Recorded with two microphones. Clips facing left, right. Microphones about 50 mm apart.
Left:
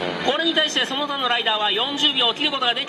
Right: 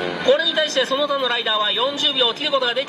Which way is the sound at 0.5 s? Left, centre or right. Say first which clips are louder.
Right 2 dB; left.